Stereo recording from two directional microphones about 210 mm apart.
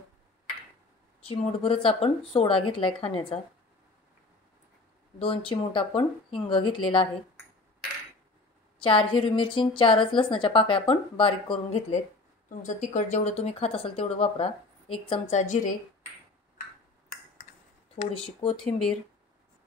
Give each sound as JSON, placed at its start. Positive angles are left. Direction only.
{"t": 1.2, "sound": "a woman's voice", "side_deg": 25}
{"t": 5.2, "sound": "a woman's voice", "side_deg": 25}
{"t": 8.8, "sound": "a woman's voice", "side_deg": 25}
{"t": 12.4, "sound": "a woman's voice", "side_deg": 35}
{"t": 18.1, "sound": "a woman's voice", "side_deg": 25}
{"t": 18.6, "sound": "speech", "side_deg": 5}